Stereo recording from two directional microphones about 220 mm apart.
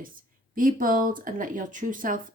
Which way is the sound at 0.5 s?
40° right (ahead or behind).